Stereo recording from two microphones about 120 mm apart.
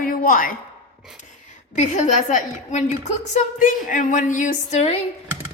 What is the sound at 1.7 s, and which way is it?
A woman's voice, 85° left.